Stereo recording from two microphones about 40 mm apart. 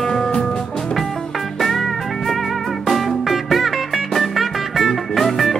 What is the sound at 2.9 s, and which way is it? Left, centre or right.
Music, centre.